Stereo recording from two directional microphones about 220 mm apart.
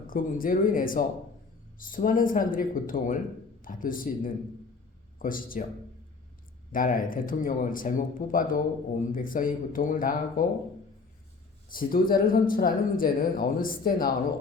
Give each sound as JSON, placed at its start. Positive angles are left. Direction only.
{"t": 0.1, "sound": "speech", "side_deg": 40}
{"t": 6.7, "sound": "speech", "side_deg": 40}
{"t": 11.7, "sound": "speech", "side_deg": 40}